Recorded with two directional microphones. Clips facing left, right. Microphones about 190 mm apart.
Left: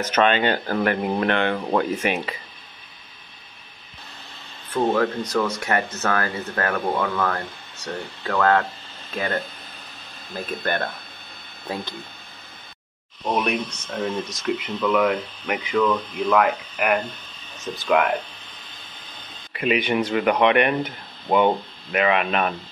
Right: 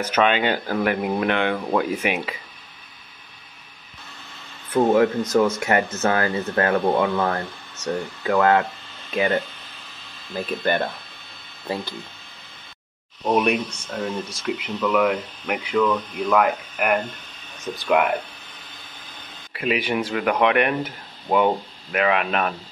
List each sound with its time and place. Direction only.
0.0 s speech: 10° right (ahead or behind)
4.9 s speech: 20° right (ahead or behind)
10.3 s speech: centre (ahead or behind)
13.2 s speech: 10° right (ahead or behind)
19.5 s speech: centre (ahead or behind)